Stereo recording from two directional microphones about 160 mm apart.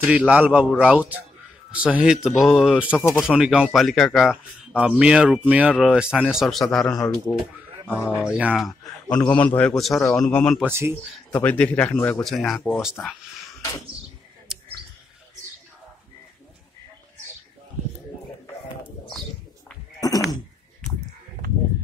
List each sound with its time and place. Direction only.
0.1 s a man's voice: 5° right (ahead or behind)
7.3 s speech: 20° left (ahead or behind)
8.1 s speech: 5° right (ahead or behind)
10.7 s a man's voice: 15° right (ahead or behind)
11.3 s a man's voice: 10° left (ahead or behind)
20.0 s a sound: 20° left (ahead or behind)